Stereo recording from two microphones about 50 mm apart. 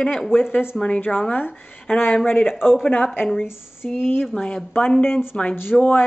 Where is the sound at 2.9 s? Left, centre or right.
Left.